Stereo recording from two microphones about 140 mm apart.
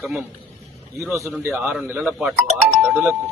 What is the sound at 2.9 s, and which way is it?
Speech, 15° right (ahead or behind).